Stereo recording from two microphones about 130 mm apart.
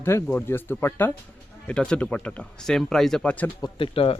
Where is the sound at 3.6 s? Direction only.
45° left (ahead or behind).